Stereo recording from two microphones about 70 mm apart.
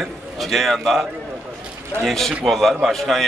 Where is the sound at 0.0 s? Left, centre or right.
Centre.